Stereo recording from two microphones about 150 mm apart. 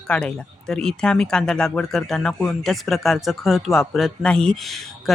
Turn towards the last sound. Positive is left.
turn(degrees=0)  # may be behind; listen again after turning